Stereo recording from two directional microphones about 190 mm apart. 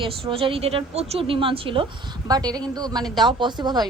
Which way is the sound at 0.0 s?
30° right (ahead or behind).